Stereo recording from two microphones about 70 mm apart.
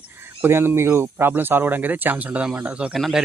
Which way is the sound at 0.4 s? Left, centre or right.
Right.